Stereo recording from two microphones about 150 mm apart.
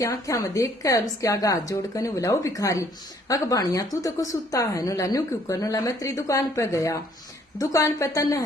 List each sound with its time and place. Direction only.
0.0 s a woman's voice: 20° left (ahead or behind)